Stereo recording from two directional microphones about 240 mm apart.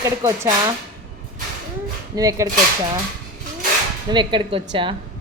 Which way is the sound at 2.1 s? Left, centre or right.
Centre.